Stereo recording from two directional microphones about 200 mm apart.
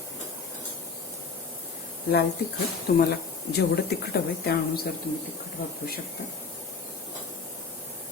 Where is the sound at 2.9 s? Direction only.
50° left (ahead or behind).